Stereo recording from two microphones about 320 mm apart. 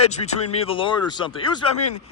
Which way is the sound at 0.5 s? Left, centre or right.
Centre.